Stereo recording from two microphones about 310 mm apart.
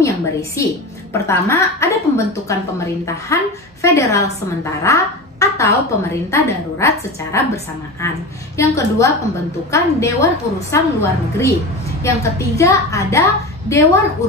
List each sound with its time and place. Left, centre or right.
0.0 s a woman's voice: centre
8.5 s a woman's voice: centre